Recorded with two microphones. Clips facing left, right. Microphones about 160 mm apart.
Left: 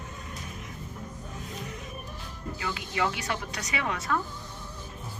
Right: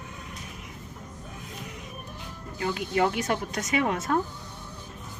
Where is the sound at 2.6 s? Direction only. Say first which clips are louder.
Right 5 dB; 45° right (ahead or behind).